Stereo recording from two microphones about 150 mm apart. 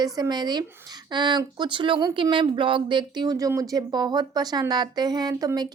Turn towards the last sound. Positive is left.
turn(degrees=-25)  # may be behind; listen again after turning